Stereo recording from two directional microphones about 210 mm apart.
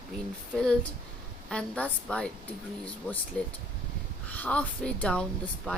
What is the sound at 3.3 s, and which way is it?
A woman's voice, 5° left (ahead or behind).